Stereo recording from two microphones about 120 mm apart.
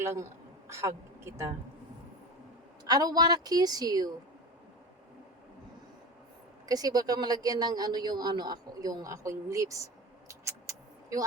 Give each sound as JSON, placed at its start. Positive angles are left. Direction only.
{"t": 0.0, "sound": "a woman's voice", "side_deg": -20}
{"t": 2.8, "sound": "a woman's voice", "side_deg": -35}
{"t": 6.7, "sound": "a man's voice", "side_deg": -30}